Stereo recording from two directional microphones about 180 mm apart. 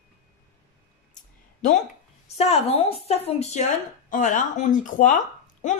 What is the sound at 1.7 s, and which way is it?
Speech, 40° left (ahead or behind).